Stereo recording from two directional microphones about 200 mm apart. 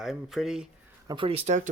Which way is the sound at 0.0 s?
Centre (ahead or behind).